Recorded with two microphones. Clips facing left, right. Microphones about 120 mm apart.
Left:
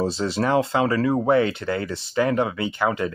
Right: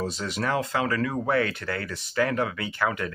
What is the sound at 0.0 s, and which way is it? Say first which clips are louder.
Speech: left 6 dB; 30° left (ahead or behind).